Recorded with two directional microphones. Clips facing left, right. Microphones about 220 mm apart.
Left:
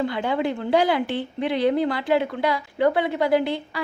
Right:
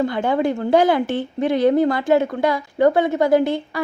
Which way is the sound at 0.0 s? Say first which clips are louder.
Right 4 dB; 45° right (ahead or behind).